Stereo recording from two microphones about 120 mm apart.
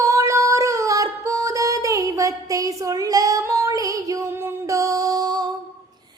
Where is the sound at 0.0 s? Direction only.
25° right (ahead or behind).